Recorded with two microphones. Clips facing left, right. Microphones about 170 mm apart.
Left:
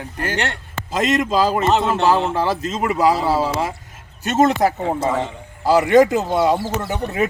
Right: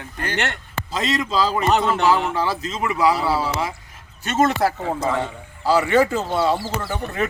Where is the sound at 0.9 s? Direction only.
10° left (ahead or behind).